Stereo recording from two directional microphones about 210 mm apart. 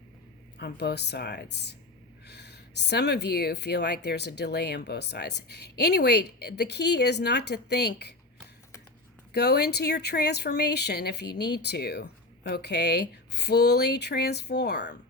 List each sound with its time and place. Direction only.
0.6 s speech: 50° left (ahead or behind)
9.3 s speech: 50° left (ahead or behind)